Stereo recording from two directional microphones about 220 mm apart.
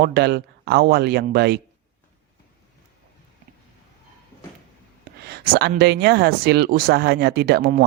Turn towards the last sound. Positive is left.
turn(degrees=-45)  # may be behind; listen again after turning